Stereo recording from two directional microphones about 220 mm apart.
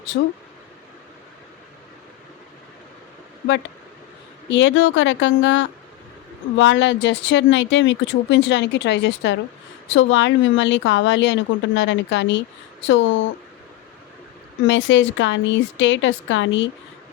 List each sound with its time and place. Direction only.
4.4 s speech: 55° left (ahead or behind)
14.7 s speech: 60° left (ahead or behind)